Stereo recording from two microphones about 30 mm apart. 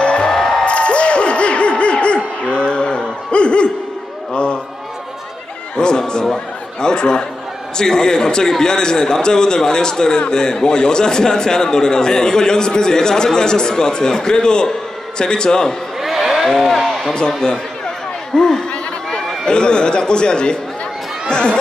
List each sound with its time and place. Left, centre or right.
0.0 s music: left
0.3 s music: centre
0.7 s a sound: left
5.8 s music: left
6.3 s a man's voice: left
16.0 s a sound: centre
16.3 s speech: centre
18.3 s a man's voice: centre
19.4 s a man's voice: left